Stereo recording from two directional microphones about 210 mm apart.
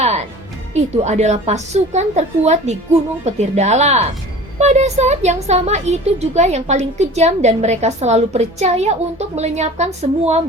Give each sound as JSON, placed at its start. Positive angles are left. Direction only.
{"t": 0.0, "sound": "music", "side_deg": -30}
{"t": 0.7, "sound": "speech", "side_deg": -30}